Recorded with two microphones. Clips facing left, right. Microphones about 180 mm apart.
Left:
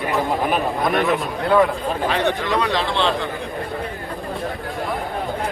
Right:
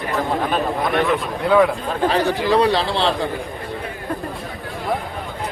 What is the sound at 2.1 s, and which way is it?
Speech, 35° right (ahead or behind).